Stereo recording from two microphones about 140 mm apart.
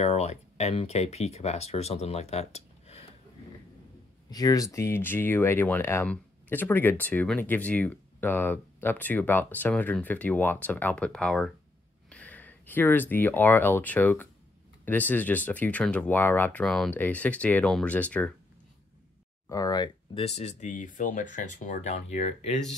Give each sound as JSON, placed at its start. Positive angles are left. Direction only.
{"t": 0.0, "sound": "speech", "side_deg": 50}
{"t": 4.3, "sound": "speech", "side_deg": 25}
{"t": 19.5, "sound": "speech", "side_deg": 25}
{"t": 20.2, "sound": "speech", "side_deg": 50}